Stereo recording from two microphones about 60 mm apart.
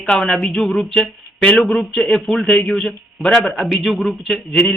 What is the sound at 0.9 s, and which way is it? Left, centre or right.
Speech, centre.